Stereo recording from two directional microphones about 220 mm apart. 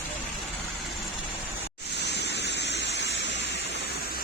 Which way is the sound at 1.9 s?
50° left (ahead or behind).